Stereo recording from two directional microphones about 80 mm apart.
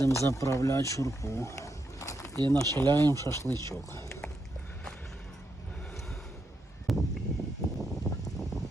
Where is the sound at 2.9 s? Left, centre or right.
Right.